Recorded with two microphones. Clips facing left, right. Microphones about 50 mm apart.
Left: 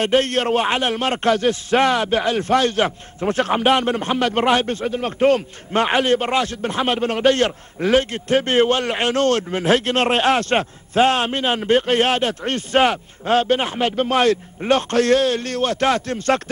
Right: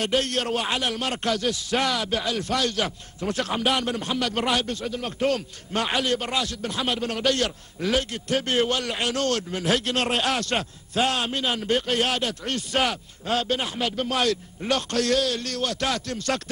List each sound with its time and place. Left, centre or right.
0.0 s a man's voice: left